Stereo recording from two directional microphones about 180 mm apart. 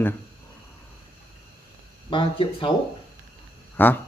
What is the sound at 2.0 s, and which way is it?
Speech, 25° left (ahead or behind).